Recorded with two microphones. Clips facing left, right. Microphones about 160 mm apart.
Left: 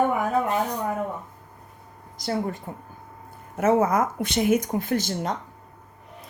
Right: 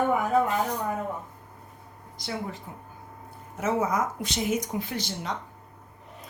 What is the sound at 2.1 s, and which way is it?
Speech, 45° left (ahead or behind).